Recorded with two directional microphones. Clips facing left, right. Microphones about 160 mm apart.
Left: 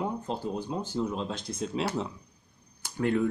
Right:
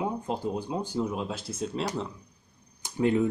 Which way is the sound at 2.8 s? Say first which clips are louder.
Right 2 dB; 20° right (ahead or behind).